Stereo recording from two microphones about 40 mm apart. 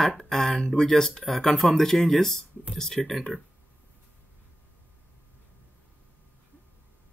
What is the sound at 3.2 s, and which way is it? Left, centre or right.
Speech, centre.